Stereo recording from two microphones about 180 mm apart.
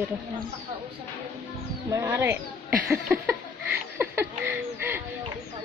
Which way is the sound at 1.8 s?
20° right (ahead or behind).